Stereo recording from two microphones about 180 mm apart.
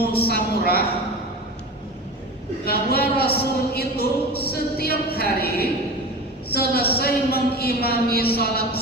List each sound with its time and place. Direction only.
0.0 s a woman's voice: 60° left (ahead or behind)
2.6 s a sound: 60° left (ahead or behind)
4.4 s speech: 60° left (ahead or behind)